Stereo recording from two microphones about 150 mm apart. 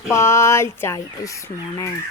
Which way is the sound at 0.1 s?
20° left (ahead or behind).